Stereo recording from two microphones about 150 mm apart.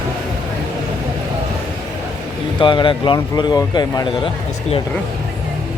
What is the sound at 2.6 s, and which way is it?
Speech, 30° left (ahead or behind).